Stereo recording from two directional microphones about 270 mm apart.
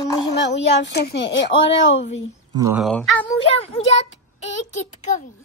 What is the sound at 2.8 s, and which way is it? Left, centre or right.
Speech, centre.